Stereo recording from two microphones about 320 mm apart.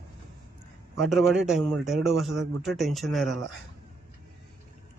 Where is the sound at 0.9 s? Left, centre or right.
Centre.